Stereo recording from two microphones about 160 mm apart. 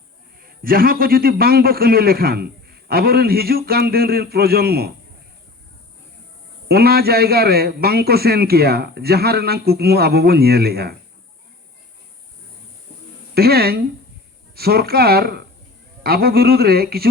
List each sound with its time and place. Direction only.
0.4 s a man's voice: 65° right (ahead or behind)
6.7 s a man's voice: 75° right (ahead or behind)
13.3 s a man's voice: 75° right (ahead or behind)